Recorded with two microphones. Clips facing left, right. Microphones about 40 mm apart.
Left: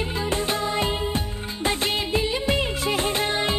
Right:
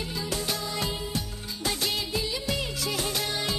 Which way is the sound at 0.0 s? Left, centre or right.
Left.